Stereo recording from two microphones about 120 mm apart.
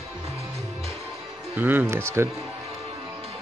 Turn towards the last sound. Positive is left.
turn(degrees=-20)  # may be behind; listen again after turning